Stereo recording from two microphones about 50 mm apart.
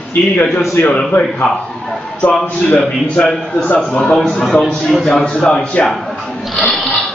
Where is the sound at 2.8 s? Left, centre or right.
Centre.